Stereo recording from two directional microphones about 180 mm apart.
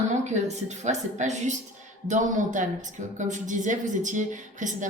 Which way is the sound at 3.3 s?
45° right (ahead or behind).